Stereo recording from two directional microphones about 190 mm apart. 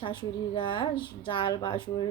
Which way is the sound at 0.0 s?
25° left (ahead or behind).